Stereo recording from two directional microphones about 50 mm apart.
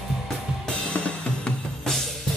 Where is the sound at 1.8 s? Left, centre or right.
Centre.